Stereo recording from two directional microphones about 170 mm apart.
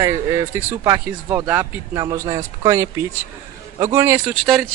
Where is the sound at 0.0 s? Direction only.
20° right (ahead or behind).